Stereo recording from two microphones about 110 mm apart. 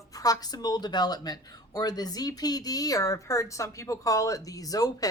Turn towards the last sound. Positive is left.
turn(degrees=35)  # may be behind; listen again after turning